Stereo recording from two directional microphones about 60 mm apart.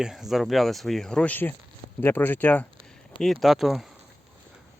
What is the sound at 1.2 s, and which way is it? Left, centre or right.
Speech, left.